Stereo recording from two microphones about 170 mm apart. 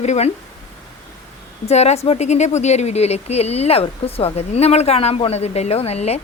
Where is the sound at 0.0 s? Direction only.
40° left (ahead or behind).